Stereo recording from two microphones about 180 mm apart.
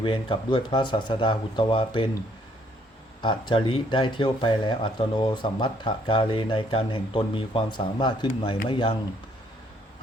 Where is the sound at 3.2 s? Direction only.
25° left (ahead or behind).